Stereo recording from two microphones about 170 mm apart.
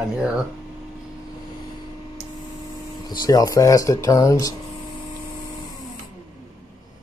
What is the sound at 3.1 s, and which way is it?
Speech, 20° left (ahead or behind).